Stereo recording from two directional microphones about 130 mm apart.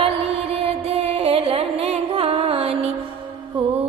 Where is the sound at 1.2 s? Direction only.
45° right (ahead or behind).